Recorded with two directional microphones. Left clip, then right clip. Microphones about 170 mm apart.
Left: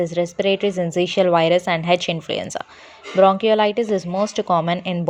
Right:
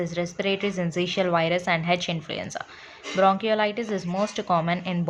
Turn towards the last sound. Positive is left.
turn(degrees=30)  # may be behind; listen again after turning